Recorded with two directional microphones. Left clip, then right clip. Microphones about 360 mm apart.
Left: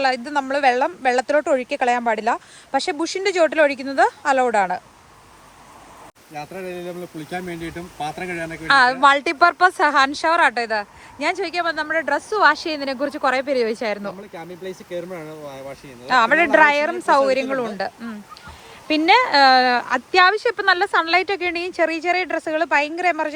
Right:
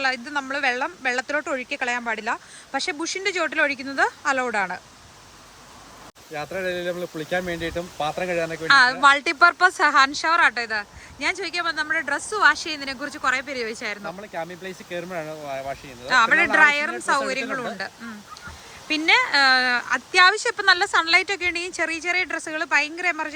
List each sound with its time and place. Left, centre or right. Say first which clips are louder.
0.0 s speech: left 4 dB; centre
6.4 s speech: right 4 dB; centre
14.6 s speech: left 3 dB; right
16.0 s speech: left 2 dB; centre